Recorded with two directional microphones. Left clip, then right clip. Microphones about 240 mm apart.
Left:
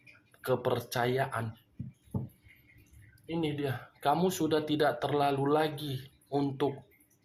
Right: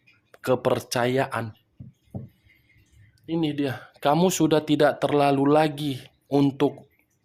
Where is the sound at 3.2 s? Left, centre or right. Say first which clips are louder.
Right 7 dB; right.